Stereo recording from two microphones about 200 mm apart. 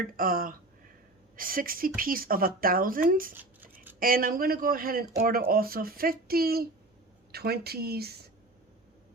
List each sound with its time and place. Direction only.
0.0 s speech: 45° right (ahead or behind)